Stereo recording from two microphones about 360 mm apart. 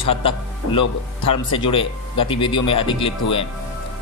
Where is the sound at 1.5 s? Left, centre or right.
Centre.